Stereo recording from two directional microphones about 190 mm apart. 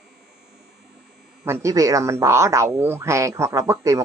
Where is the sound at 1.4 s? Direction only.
15° right (ahead or behind).